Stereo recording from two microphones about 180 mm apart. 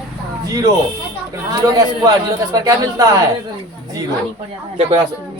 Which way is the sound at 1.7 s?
20° right (ahead or behind).